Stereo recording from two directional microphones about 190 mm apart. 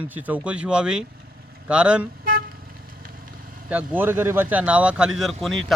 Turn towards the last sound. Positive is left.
turn(degrees=0)  # may be behind; listen again after turning